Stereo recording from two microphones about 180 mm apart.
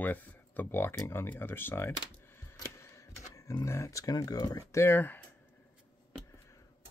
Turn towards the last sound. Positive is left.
turn(degrees=10)  # may be behind; listen again after turning